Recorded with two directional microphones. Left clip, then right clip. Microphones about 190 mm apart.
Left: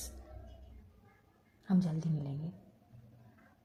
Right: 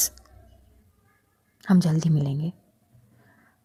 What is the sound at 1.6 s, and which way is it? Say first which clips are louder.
Speech: right 12 dB; 40° right (ahead or behind).